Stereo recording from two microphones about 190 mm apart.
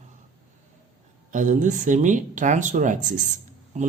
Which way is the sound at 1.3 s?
40° right (ahead or behind).